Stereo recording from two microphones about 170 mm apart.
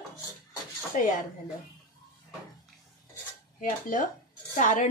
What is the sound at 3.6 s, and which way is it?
Speech, 50° left (ahead or behind).